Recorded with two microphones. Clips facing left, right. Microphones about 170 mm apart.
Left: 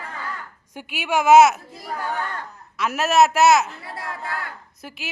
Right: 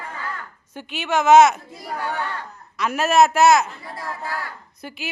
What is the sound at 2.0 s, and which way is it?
Speech, 45° left (ahead or behind).